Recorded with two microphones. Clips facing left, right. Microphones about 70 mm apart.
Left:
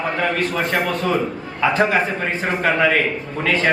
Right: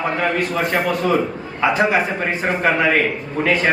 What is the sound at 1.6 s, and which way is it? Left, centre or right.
A man's voice, centre.